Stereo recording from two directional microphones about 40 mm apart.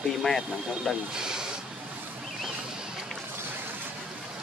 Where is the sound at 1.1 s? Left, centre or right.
Centre.